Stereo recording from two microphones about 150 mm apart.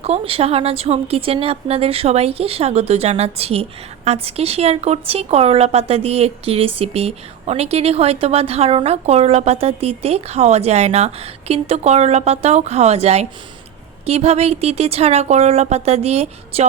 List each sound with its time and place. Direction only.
0.0 s speech: 40° right (ahead or behind)